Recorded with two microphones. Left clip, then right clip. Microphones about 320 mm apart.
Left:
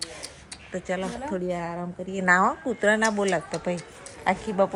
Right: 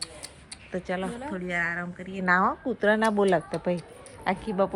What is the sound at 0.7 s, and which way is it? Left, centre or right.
A woman's voice, centre.